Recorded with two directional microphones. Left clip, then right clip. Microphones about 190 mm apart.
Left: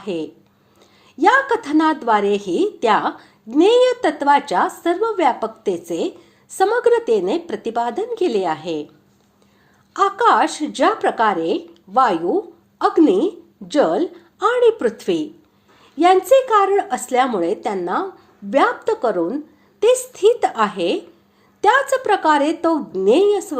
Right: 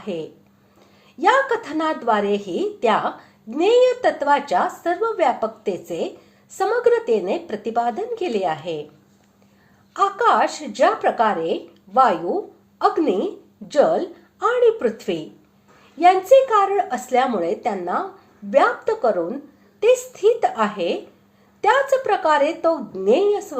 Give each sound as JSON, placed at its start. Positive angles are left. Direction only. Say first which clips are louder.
{"t": 0.0, "sound": "a woman's voice", "louder": "left 3 dB", "side_deg": 35}
{"t": 9.9, "sound": "a woman's voice", "louder": "left 2 dB", "side_deg": 35}